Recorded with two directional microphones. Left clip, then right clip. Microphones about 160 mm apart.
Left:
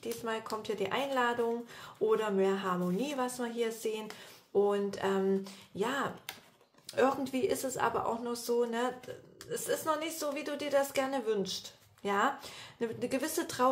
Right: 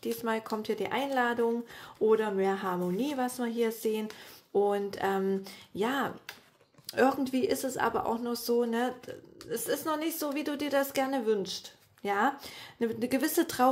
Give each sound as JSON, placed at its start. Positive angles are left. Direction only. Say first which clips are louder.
{"t": 0.0, "sound": "speech", "louder": "right 4 dB", "side_deg": -35}